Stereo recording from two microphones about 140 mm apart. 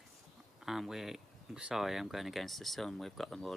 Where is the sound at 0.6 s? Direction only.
Centre (ahead or behind).